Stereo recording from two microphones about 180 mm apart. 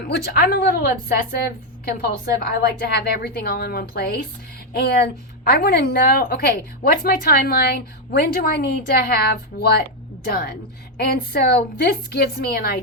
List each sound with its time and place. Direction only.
0.3 s a woman's voice: 60° left (ahead or behind)